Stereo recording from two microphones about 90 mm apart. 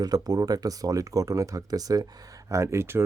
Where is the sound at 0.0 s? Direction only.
45° right (ahead or behind).